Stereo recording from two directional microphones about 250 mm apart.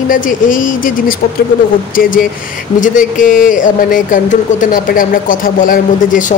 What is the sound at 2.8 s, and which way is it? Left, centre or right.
Speech, left.